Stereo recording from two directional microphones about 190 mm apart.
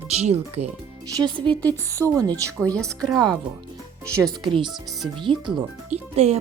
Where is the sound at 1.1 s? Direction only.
25° right (ahead or behind).